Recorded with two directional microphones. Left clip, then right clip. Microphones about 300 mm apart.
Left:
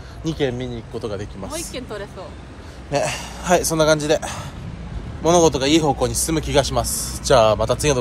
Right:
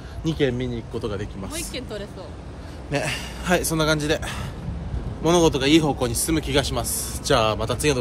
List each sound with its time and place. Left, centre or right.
0.2 s speech: centre
1.8 s speech: centre
2.9 s speech: centre